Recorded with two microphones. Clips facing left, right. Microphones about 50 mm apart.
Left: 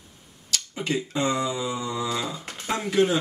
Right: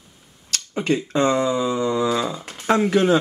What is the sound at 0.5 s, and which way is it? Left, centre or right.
Speech, right.